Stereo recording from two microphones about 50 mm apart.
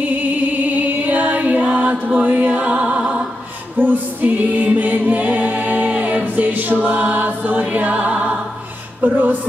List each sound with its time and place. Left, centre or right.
0.2 s music: right
3.7 s music: right
9.0 s a sound: right